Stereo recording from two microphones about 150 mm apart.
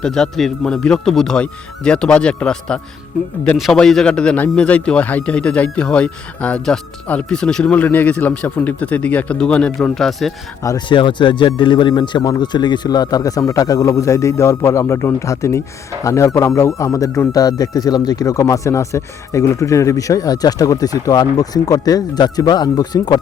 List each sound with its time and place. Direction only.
0.0 s a man's voice: 5° left (ahead or behind)
10.6 s speech: 25° left (ahead or behind)